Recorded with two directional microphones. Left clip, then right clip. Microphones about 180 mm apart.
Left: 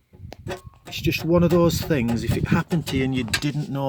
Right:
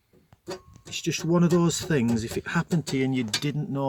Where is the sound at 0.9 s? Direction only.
15° left (ahead or behind).